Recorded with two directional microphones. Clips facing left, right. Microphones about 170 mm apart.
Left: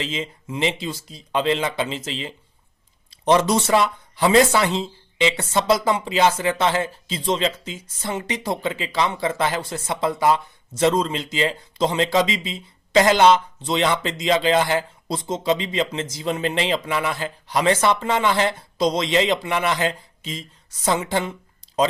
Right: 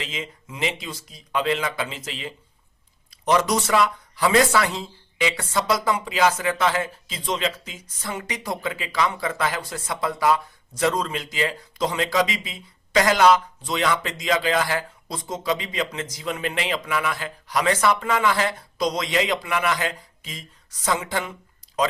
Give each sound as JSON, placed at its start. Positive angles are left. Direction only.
{"t": 0.0, "sound": "speech", "side_deg": 30}